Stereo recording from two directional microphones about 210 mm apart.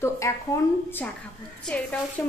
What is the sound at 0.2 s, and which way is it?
Speech, 15° left (ahead or behind).